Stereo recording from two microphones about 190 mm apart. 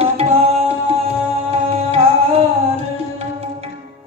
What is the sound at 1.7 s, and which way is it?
Music, 30° right (ahead or behind).